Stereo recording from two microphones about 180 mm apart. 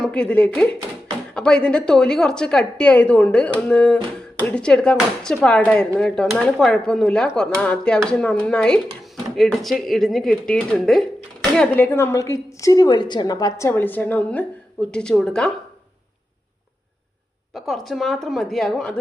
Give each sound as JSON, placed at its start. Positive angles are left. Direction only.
{"t": 0.0, "sound": "a woman's voice", "side_deg": 5}
{"t": 17.5, "sound": "a woman's voice", "side_deg": 0}